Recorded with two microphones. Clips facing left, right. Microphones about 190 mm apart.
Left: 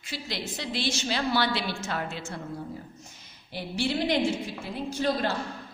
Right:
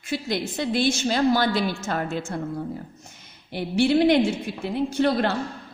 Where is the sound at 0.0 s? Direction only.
50° right (ahead or behind).